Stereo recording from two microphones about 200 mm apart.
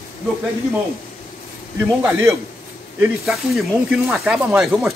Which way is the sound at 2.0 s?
15° right (ahead or behind).